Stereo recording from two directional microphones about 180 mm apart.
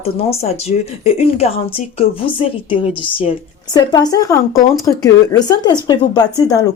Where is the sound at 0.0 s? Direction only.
35° left (ahead or behind).